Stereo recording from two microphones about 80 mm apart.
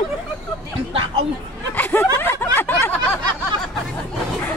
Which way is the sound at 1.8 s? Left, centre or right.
Left.